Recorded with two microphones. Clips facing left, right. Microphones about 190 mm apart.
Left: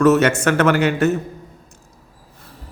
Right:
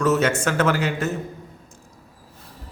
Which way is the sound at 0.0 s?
70° left (ahead or behind).